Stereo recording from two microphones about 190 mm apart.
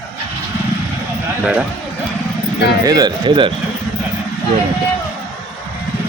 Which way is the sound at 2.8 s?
20° right (ahead or behind).